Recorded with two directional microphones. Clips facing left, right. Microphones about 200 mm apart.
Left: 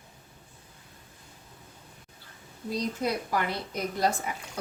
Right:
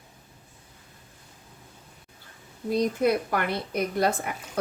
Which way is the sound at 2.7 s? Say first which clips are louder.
Right 7 dB; 60° right (ahead or behind).